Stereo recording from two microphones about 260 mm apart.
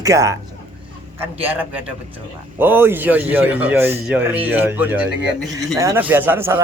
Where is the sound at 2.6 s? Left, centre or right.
Centre.